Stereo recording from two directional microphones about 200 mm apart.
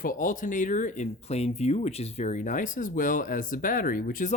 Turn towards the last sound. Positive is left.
turn(degrees=40)  # may be behind; listen again after turning